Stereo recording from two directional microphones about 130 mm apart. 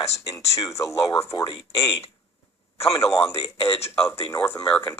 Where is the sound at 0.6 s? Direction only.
25° left (ahead or behind).